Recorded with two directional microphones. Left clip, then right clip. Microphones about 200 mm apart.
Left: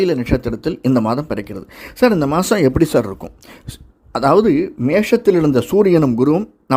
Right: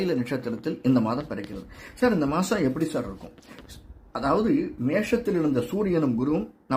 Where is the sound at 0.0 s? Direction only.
35° left (ahead or behind).